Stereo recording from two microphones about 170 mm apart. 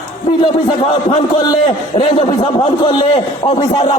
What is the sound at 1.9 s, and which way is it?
A man's voice, 30° left (ahead or behind).